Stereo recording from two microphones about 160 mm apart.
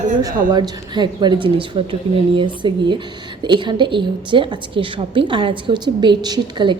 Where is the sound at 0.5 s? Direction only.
25° right (ahead or behind).